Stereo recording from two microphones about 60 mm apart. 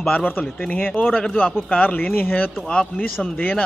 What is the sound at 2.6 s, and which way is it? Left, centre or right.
Speech, left.